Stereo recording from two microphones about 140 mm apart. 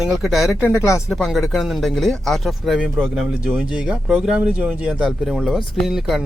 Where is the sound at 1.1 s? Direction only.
Centre (ahead or behind).